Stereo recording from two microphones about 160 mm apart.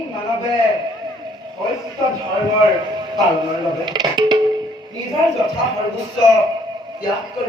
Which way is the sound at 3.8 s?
25° right (ahead or behind).